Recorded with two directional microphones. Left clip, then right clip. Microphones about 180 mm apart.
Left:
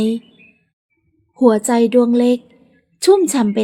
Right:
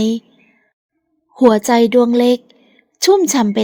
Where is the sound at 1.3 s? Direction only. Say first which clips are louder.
Right 2 dB; 40° right (ahead or behind).